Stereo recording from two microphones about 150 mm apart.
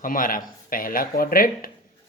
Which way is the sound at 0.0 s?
65° left (ahead or behind).